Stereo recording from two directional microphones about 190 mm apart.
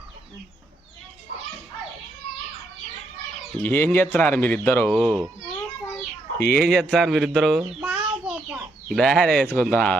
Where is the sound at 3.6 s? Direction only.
10° left (ahead or behind).